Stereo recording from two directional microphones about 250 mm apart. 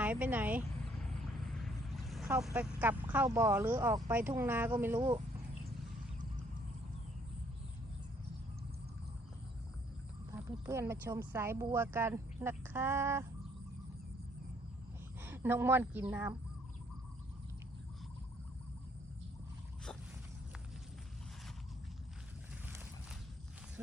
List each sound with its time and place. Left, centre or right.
0.0 s a sound: centre
1.0 s vehicle: centre
2.2 s speech: centre
4.9 s speech: right
10.3 s speech: centre
15.2 s a woman's voice: centre